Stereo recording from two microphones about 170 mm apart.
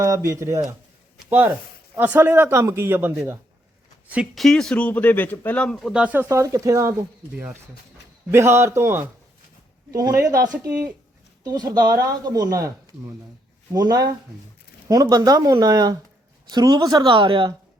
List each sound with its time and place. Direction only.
0.0 s a man's voice: 20° right (ahead or behind)
2.0 s a man's voice: 10° right (ahead or behind)
4.1 s a man's voice: centre (ahead or behind); by 10.5 s 20° right (ahead or behind)
10.7 s a man's voice: 5° right (ahead or behind)
11.4 s speech: 25° right (ahead or behind)
13.7 s speech: 20° right (ahead or behind)